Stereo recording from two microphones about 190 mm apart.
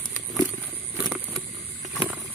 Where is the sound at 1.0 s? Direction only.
10° right (ahead or behind).